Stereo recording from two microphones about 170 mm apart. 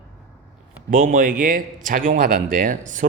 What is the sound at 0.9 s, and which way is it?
Speech, 55° right (ahead or behind).